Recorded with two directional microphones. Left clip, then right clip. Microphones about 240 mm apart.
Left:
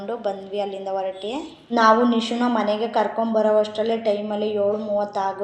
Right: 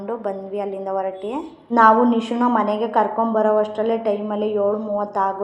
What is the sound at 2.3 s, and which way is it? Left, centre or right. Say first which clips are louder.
A woman's voice: right 3 dB; centre.